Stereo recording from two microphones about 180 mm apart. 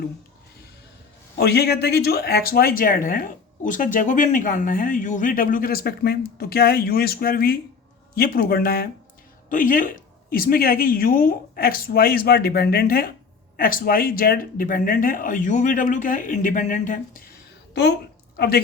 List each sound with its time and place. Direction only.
1.4 s speech: 65° left (ahead or behind)
18.3 s speech: 60° left (ahead or behind)